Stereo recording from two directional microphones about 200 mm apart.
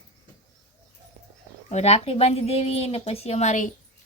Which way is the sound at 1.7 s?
30° left (ahead or behind).